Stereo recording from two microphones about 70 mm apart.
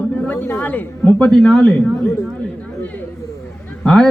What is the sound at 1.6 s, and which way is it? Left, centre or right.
Speech, centre.